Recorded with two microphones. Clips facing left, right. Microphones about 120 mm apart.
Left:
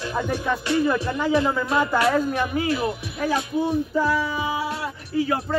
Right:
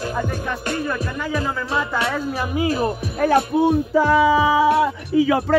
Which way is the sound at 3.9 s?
90° right.